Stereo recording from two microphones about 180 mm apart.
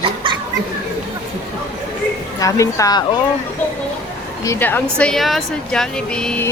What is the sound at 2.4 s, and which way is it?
Speech, 15° left (ahead or behind).